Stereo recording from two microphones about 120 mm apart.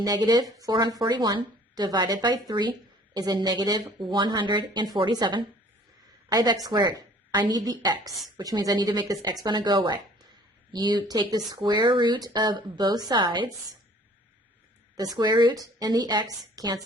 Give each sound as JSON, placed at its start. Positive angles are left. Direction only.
{"t": 0.0, "sound": "a woman's voice", "side_deg": -35}
{"t": 14.9, "sound": "speech", "side_deg": -35}